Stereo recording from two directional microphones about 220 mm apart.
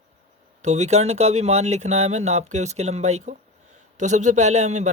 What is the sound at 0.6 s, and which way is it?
Speech, 30° right (ahead or behind).